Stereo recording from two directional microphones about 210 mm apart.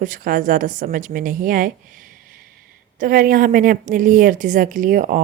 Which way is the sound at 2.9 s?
40° right (ahead or behind).